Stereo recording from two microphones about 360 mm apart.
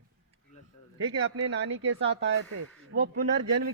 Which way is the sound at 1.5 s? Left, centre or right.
Right.